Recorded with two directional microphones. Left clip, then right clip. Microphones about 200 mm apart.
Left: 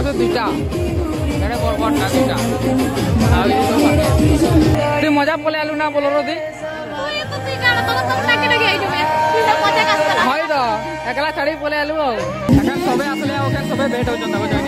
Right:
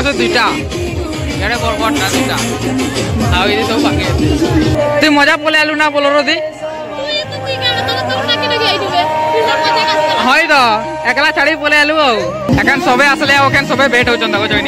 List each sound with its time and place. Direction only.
0.0 s speech: centre (ahead or behind)
1.8 s speech: 15° right (ahead or behind)
3.3 s speech: 10° right (ahead or behind)
5.0 s speech: 10° right (ahead or behind)
9.1 s a sound: 50° right (ahead or behind)
10.3 s speech: 10° right (ahead or behind)